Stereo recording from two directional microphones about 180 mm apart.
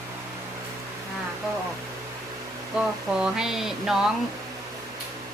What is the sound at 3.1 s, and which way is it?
Speech, 5° right (ahead or behind).